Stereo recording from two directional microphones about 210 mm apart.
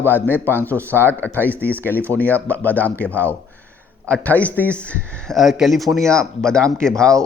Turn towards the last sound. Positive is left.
turn(degrees=5)  # may be behind; listen again after turning